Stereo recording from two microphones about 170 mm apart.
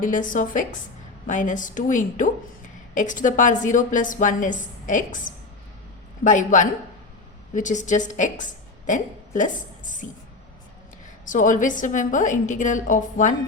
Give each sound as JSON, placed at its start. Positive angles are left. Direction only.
{"t": 0.0, "sound": "a woman's voice", "side_deg": 50}
{"t": 11.3, "sound": "a woman's voice", "side_deg": 50}